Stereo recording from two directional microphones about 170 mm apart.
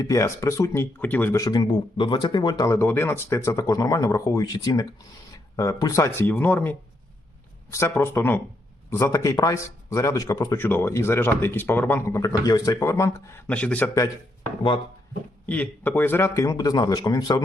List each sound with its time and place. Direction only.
0.0 s a man's voice: 20° left (ahead or behind)
15.4 s speech: 10° left (ahead or behind)